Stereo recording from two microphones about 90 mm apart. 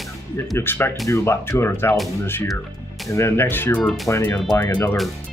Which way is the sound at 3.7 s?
5° left (ahead or behind).